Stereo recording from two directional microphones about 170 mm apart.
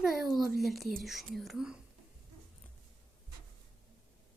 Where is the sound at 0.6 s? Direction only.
Centre (ahead or behind).